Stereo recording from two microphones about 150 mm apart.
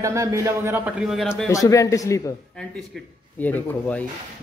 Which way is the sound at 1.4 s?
20° left (ahead or behind).